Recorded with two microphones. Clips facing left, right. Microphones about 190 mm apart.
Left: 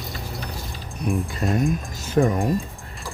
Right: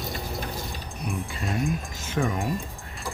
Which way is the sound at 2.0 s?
35° left (ahead or behind).